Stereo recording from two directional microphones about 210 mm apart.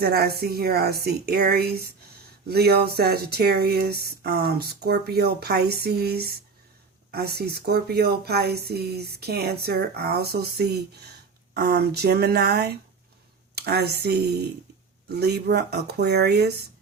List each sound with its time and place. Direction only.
0.0 s speech: 45° right (ahead or behind)